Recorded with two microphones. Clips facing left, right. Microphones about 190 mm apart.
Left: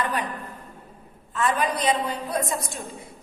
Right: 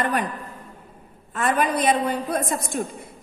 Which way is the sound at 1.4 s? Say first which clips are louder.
Right 2 dB; 55° right (ahead or behind).